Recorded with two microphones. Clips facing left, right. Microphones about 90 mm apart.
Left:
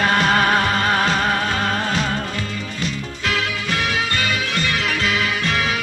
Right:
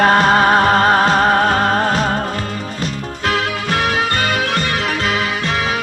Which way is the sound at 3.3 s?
45° right (ahead or behind).